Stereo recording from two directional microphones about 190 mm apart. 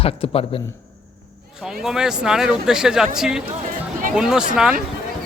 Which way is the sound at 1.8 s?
5° right (ahead or behind).